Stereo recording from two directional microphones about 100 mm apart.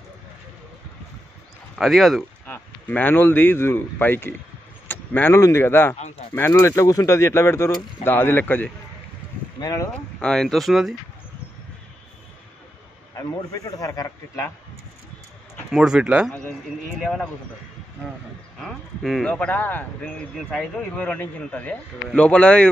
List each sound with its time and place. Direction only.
1.8 s speech: centre (ahead or behind)
2.4 s speech: 15° left (ahead or behind)
4.8 s a sound: 20° left (ahead or behind)
5.3 s speech: 30° left (ahead or behind)
5.9 s speech: 90° left
6.5 s speech: 35° left (ahead or behind)
9.6 s speech: 35° left (ahead or behind)
10.2 s speech: 5° left (ahead or behind)
13.1 s speech: 35° left (ahead or behind)
15.7 s speech: 5° right (ahead or behind)
16.3 s speech: 5° left (ahead or behind)
18.6 s speech: centre (ahead or behind)
20.3 s speech: 5° left (ahead or behind)
21.0 s speech: 15° left (ahead or behind)